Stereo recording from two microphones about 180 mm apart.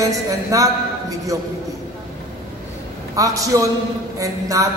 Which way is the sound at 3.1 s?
20° right (ahead or behind).